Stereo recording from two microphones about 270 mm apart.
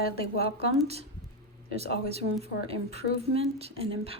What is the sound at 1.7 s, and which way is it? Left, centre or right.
Speech, left.